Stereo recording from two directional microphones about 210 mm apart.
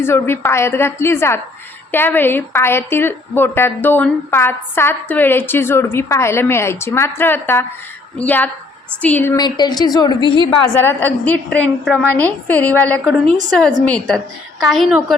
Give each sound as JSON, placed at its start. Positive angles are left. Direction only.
{"t": 0.0, "sound": "a woman's voice", "side_deg": 10}
{"t": 10.8, "sound": "a woman's voice", "side_deg": 10}